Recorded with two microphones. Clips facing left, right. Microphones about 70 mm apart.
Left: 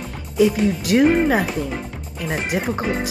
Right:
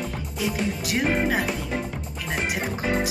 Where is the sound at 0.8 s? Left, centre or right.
Left.